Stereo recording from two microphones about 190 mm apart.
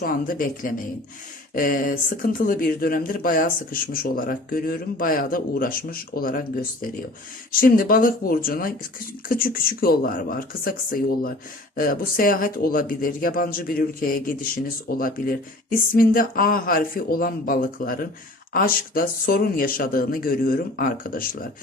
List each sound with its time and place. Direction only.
0.0 s speech: 50° left (ahead or behind)